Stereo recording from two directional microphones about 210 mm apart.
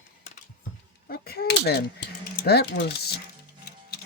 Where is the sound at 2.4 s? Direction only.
50° left (ahead or behind).